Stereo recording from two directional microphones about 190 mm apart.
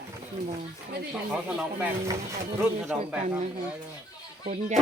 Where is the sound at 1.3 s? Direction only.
5° right (ahead or behind).